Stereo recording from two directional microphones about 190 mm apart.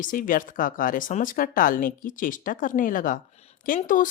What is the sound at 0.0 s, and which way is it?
A woman's voice, 45° left (ahead or behind).